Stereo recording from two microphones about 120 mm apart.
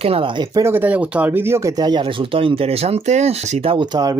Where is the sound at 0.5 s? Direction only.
20° right (ahead or behind).